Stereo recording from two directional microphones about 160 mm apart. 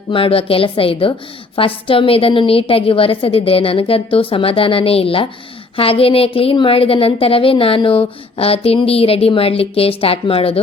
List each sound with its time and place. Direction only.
0.1 s a woman's voice: 35° left (ahead or behind)